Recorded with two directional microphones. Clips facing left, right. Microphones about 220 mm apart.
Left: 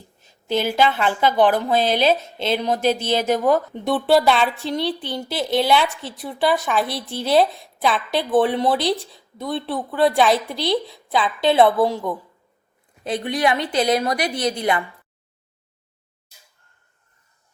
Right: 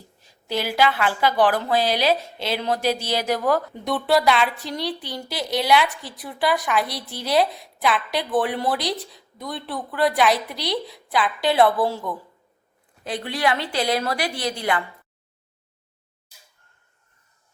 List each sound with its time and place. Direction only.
0.2 s speech: 25° left (ahead or behind)